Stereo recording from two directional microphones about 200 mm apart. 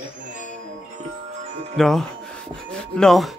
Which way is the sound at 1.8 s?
Centre (ahead or behind).